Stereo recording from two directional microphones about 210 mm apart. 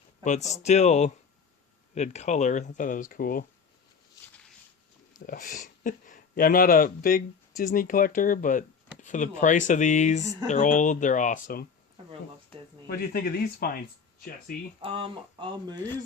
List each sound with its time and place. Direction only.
0.6 s speech: 30° left (ahead or behind)
5.2 s speech: 40° left (ahead or behind)
12.9 s speech: 45° left (ahead or behind)
14.8 s speech: 25° right (ahead or behind)